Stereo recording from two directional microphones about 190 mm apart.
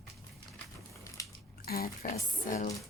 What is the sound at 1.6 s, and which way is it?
Speech, 50° left (ahead or behind).